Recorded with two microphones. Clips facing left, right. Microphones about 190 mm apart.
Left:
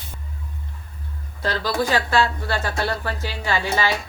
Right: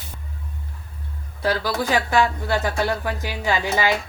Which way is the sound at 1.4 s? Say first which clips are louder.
Right 1 dB; 10° right (ahead or behind).